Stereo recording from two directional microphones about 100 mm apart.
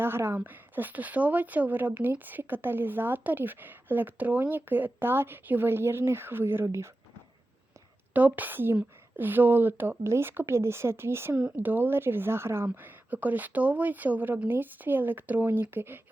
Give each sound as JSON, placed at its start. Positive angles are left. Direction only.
{"t": 0.0, "sound": "a woman's voice", "side_deg": -25}
{"t": 8.1, "sound": "a woman's voice", "side_deg": -15}